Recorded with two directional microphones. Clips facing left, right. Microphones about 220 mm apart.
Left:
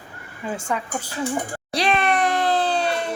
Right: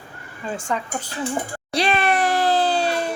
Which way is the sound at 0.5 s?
10° left (ahead or behind).